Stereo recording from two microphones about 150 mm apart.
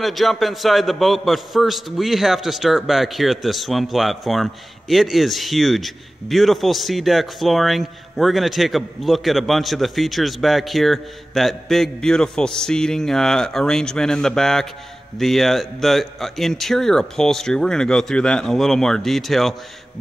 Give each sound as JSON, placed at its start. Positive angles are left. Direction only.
{"t": 0.0, "sound": "a man's voice", "side_deg": 0}